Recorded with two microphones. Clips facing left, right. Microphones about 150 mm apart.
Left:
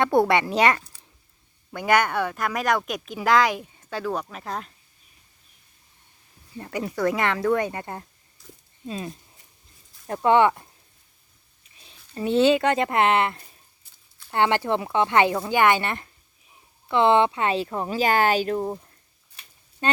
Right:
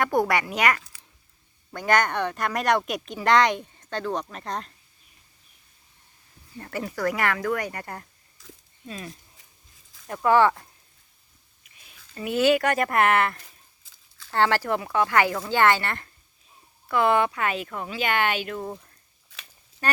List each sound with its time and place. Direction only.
0.0 s speech: 25° left (ahead or behind)
1.7 s speech: 10° left (ahead or behind)
6.6 s speech: 15° left (ahead or behind)
8.4 s a sound: 90° right
8.9 s speech: 25° left (ahead or behind)
11.6 s speech: 30° left (ahead or behind)
13.8 s a sound: 90° right
14.3 s speech: 20° left (ahead or behind); by 18.7 s 35° left (ahead or behind)
19.8 s speech: 20° left (ahead or behind)